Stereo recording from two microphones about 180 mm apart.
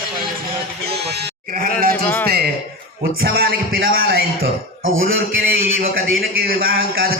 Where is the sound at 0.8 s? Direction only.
65° right (ahead or behind).